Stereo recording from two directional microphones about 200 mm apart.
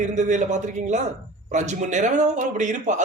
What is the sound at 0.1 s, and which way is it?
A man's voice, 35° right (ahead or behind).